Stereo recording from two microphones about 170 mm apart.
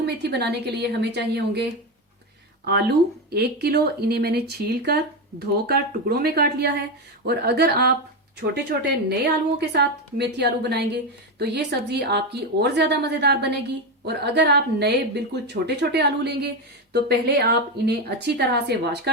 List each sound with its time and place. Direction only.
0.0 s a woman's voice: 80° right
2.6 s a woman's voice: 70° right (ahead or behind)